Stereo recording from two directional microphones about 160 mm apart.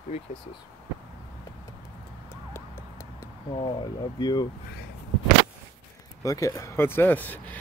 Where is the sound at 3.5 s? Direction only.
30° left (ahead or behind).